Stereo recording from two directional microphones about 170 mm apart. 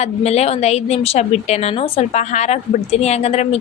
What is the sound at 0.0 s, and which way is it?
A woman's voice, 40° left (ahead or behind).